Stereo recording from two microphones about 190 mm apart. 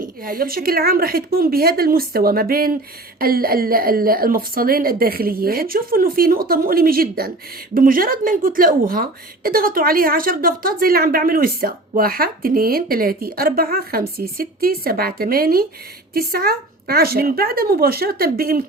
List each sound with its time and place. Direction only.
0.0 s speech: 50° right (ahead or behind)